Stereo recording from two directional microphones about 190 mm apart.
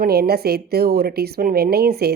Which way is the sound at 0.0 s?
55° right (ahead or behind).